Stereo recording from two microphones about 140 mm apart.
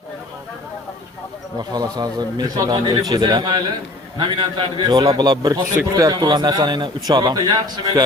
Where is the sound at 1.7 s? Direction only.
30° right (ahead or behind).